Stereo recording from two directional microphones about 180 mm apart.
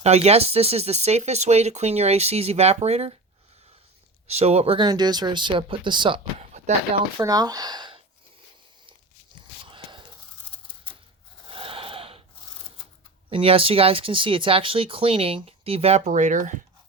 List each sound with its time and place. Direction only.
0.0 s speech: 35° right (ahead or behind)
4.3 s speech: 35° right (ahead or behind)
7.2 s speech: 20° right (ahead or behind)
9.6 s a sound: 25° right (ahead or behind)
11.4 s a sound: 30° right (ahead or behind)
13.3 s speech: 30° right (ahead or behind)